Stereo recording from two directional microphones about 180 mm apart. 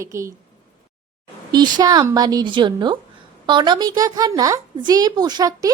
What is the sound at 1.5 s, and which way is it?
A woman's voice, 25° right (ahead or behind).